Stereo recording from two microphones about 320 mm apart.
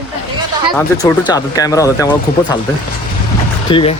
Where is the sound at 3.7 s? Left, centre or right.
Centre.